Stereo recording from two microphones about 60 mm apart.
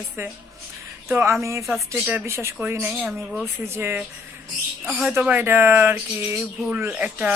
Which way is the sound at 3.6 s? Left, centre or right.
Right.